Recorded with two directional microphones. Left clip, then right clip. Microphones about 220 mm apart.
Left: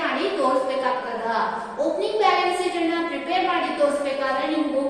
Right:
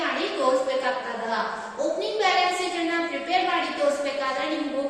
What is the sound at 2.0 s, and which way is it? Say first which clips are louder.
Child singing: left 4 dB; 15° right (ahead or behind).